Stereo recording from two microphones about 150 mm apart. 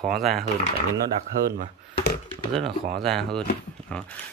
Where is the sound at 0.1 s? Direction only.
Centre (ahead or behind).